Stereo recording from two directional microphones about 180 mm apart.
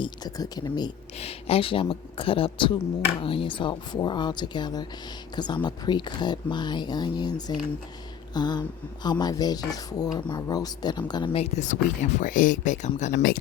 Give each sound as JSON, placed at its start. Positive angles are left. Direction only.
{"t": 0.0, "sound": "speech", "side_deg": 20}
{"t": 1.2, "sound": "speech", "side_deg": 35}
{"t": 8.3, "sound": "a sound", "side_deg": 25}
{"t": 9.0, "sound": "speech", "side_deg": 20}